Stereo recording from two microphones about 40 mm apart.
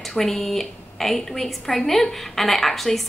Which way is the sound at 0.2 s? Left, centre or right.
Centre.